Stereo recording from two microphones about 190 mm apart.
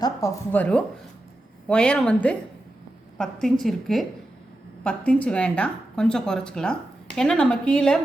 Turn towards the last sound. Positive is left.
turn(degrees=5)  # may be behind; listen again after turning